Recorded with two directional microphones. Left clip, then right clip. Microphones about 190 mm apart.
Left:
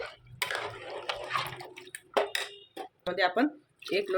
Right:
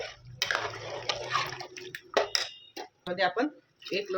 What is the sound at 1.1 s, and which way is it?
Water, 20° right (ahead or behind).